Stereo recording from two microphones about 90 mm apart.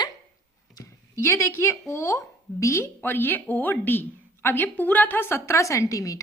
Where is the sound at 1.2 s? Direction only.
30° left (ahead or behind).